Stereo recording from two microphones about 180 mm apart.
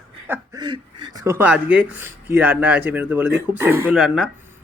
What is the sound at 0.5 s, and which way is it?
Speech, 25° right (ahead or behind).